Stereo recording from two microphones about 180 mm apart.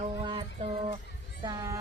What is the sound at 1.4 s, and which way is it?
Speech, 20° right (ahead or behind).